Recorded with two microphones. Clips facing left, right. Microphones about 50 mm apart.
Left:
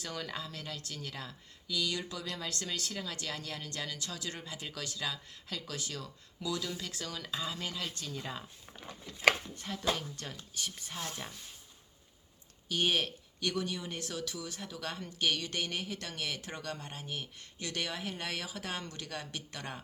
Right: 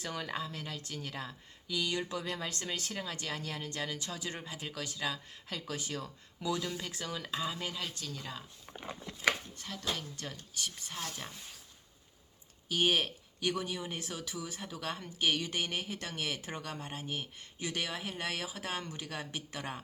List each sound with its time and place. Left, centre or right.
0.0 s speech: centre
9.6 s speech: centre
12.6 s speech: centre